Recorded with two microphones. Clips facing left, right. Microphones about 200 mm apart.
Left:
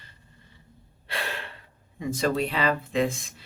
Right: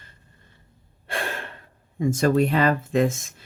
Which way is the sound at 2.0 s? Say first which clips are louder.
Right 6 dB; 45° right (ahead or behind).